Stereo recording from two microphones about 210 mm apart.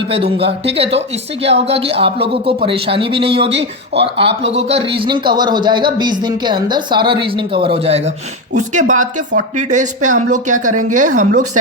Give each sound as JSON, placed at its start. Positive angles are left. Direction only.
{"t": 0.3, "sound": "speech", "side_deg": -25}